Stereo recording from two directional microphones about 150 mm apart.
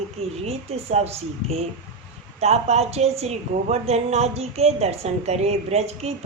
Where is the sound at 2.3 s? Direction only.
45° right (ahead or behind).